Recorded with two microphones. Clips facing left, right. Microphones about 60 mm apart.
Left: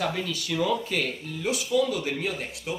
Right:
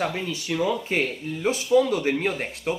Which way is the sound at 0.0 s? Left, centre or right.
Right.